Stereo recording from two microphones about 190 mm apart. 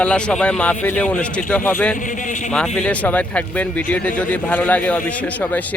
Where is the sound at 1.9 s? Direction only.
45° left (ahead or behind).